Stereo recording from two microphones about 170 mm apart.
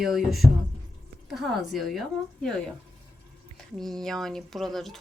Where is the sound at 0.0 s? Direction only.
Centre (ahead or behind).